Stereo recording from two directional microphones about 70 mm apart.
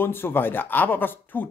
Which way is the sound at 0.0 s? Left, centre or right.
Left.